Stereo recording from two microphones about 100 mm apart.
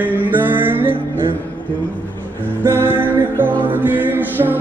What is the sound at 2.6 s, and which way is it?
Music, 25° right (ahead or behind).